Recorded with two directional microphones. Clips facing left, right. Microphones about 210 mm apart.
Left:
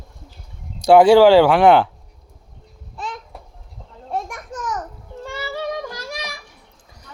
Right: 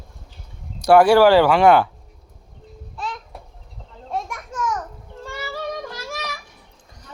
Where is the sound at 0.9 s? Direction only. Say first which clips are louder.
Left 3 dB; 15° left (ahead or behind).